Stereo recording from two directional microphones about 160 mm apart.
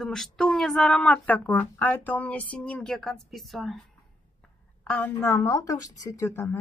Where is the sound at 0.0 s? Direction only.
Centre (ahead or behind).